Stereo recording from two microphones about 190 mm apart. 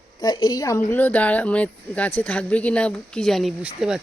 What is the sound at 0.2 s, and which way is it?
Speech, 20° left (ahead or behind).